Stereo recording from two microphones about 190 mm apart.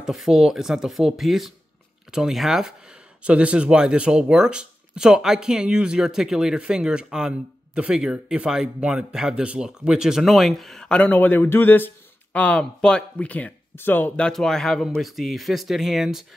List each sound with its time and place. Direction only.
0.0 s speech: centre (ahead or behind)